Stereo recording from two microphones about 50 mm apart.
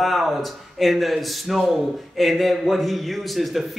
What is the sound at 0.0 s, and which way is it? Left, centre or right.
Speech, centre.